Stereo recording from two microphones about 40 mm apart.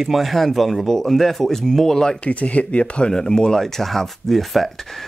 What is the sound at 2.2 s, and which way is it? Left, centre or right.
Speech, left.